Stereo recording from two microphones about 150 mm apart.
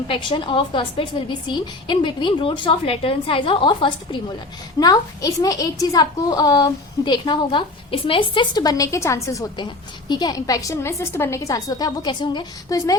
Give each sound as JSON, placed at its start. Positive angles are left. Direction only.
{"t": 0.1, "sound": "a woman's voice", "side_deg": 35}